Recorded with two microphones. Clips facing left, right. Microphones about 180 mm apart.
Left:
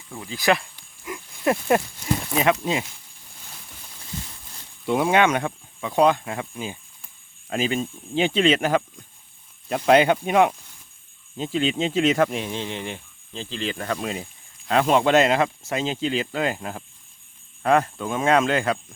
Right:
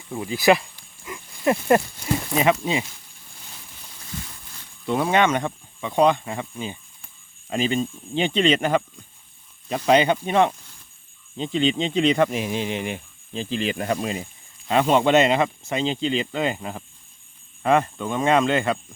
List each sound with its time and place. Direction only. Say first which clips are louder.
0.1 s speech: right 7 dB; 20° right (ahead or behind)
0.3 s speech: right 4 dB; 5° right (ahead or behind)
1.0 s a sound: right 1 dB; 5° left (ahead or behind)
2.4 s speech: right 1 dB; centre (ahead or behind)
4.9 s speech: left 1 dB; 10° left (ahead or behind); by 14.0 s 15° right (ahead or behind)
14.0 s speech: right 2 dB; centre (ahead or behind)